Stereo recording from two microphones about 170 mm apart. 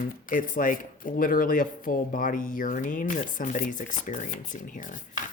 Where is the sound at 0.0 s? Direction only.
55° left (ahead or behind).